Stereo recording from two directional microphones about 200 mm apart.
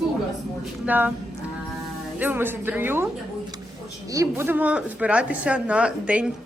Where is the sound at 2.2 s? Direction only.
10° right (ahead or behind).